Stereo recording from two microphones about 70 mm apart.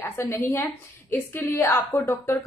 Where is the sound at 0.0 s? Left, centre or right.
Left.